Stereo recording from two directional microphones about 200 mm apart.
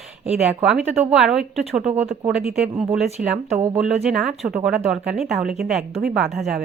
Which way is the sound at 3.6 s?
5° right (ahead or behind).